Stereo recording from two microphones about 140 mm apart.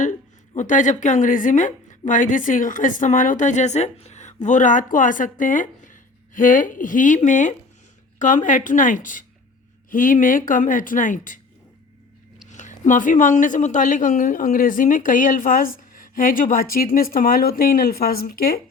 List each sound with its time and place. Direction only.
0.0 s a woman's voice: 65° left (ahead or behind)
12.5 s a woman's voice: 60° left (ahead or behind); by 18.6 s 90° left